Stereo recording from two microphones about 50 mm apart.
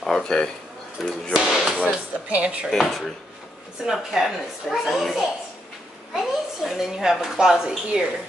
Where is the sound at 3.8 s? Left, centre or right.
Centre.